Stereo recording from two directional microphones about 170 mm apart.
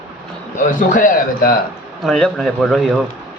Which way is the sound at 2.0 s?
Centre (ahead or behind).